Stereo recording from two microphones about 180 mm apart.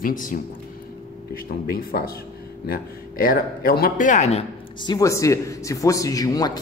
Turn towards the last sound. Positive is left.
turn(degrees=20)  # may be behind; listen again after turning